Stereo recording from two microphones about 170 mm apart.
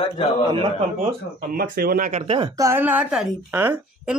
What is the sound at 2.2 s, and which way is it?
Speech, 30° right (ahead or behind).